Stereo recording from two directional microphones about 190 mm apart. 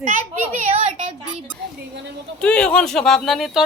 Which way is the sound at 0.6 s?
40° right (ahead or behind).